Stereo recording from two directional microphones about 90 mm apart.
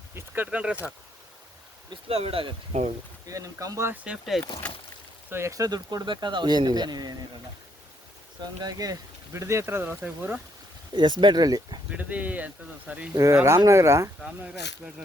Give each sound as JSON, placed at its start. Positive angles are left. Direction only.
{"t": 0.1, "sound": "speech", "side_deg": -25}
{"t": 0.4, "sound": "speech", "side_deg": -15}
{"t": 1.9, "sound": "speech", "side_deg": -90}
{"t": 3.2, "sound": "speech", "side_deg": -40}
{"t": 4.0, "sound": "speech", "side_deg": -10}
{"t": 4.4, "sound": "speech", "side_deg": 60}
{"t": 5.3, "sound": "speech", "side_deg": -30}
{"t": 8.6, "sound": "speech", "side_deg": -45}
{"t": 9.3, "sound": "speech", "side_deg": -30}
{"t": 10.9, "sound": "speech", "side_deg": -55}
{"t": 11.9, "sound": "speech", "side_deg": -15}
{"t": 13.3, "sound": "speech", "side_deg": -30}
{"t": 14.2, "sound": "speech", "side_deg": -10}